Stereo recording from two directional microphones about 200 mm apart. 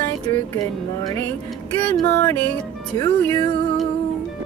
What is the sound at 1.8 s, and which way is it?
Mantra, 10° left (ahead or behind).